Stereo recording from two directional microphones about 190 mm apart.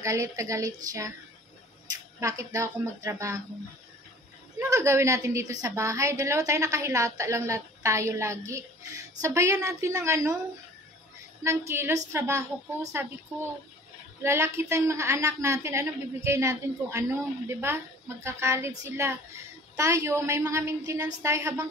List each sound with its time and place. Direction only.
0.0 s a woman's voice: 15° right (ahead or behind)
2.1 s a woman's voice: 15° right (ahead or behind)
4.6 s a woman's voice: 15° right (ahead or behind)
11.4 s a woman's voice: 15° right (ahead or behind)
14.2 s a woman's voice: 15° right (ahead or behind)